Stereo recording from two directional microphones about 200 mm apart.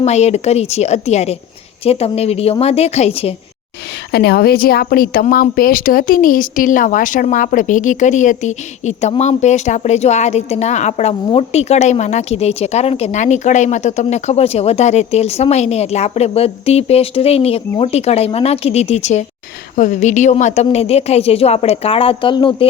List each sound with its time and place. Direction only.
0.0 s speech: 35° left (ahead or behind)
4.1 s a woman's voice: 55° left (ahead or behind); by 22.6 s 25° left (ahead or behind)